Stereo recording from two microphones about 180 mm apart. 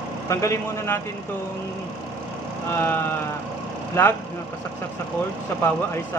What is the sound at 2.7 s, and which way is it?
Speech, 10° left (ahead or behind).